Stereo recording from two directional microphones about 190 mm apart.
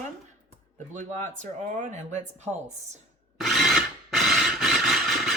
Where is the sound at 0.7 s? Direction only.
40° right (ahead or behind).